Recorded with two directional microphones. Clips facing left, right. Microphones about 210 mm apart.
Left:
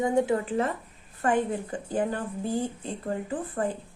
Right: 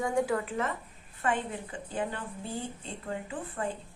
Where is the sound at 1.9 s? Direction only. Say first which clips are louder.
Left 6 dB; 40° left (ahead or behind).